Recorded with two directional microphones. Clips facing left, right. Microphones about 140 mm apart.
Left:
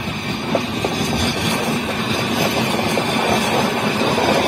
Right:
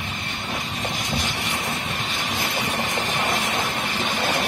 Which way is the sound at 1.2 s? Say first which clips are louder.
Left 8 dB; 70° left (ahead or behind).